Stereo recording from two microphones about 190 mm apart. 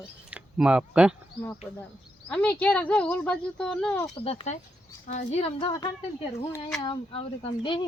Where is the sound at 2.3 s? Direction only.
5° left (ahead or behind).